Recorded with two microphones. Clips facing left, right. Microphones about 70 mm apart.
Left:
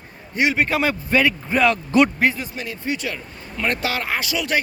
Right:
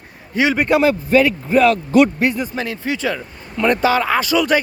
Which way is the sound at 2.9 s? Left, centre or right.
Right.